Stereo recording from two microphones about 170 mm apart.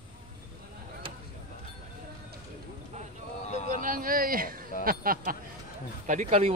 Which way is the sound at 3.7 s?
55° right (ahead or behind).